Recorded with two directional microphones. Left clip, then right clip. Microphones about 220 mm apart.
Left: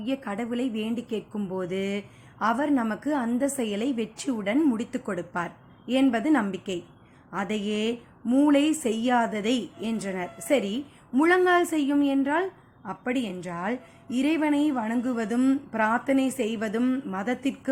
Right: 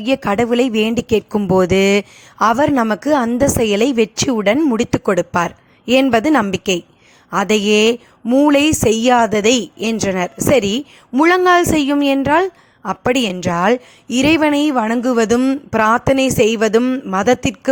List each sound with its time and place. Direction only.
0.0 s a woman's voice: 45° right (ahead or behind)